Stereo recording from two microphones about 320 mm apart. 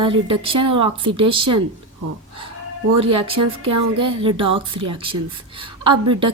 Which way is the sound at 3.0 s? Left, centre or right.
Centre.